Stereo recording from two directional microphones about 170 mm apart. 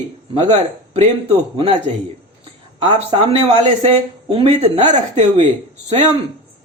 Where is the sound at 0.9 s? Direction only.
35° right (ahead or behind).